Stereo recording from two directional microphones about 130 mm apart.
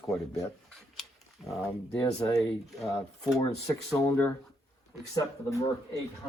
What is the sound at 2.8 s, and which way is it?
Speech, centre (ahead or behind).